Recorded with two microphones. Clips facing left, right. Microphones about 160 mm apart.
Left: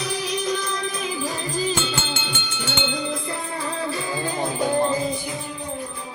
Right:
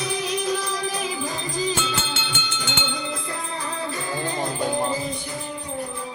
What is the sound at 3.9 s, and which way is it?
Music, 15° left (ahead or behind).